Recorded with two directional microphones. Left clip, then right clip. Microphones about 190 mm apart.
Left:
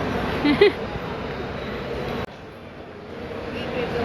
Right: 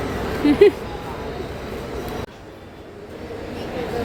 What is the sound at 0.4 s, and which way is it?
Speech, 25° right (ahead or behind).